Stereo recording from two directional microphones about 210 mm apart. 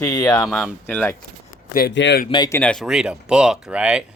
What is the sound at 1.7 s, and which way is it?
Speech, 50° left (ahead or behind).